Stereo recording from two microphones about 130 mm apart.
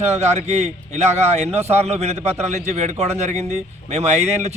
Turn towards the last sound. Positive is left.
turn(degrees=-55)  # may be behind; listen again after turning